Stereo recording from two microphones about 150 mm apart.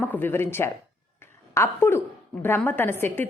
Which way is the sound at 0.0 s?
15° left (ahead or behind).